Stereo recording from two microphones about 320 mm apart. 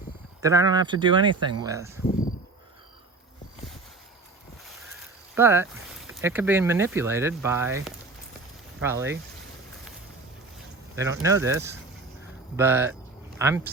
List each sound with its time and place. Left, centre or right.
0.4 s speech: centre
2.0 s speech: left
5.3 s speech: centre
8.8 s speech: centre
10.9 s speech: centre